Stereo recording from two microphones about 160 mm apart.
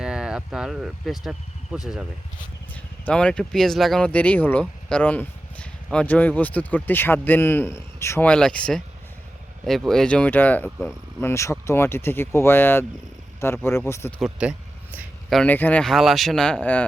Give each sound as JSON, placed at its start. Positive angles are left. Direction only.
{"t": 0.0, "sound": "speech", "side_deg": -5}
{"t": 2.7, "sound": "speech", "side_deg": 5}
{"t": 14.2, "sound": "speech", "side_deg": -5}
{"t": 15.3, "sound": "speech", "side_deg": 5}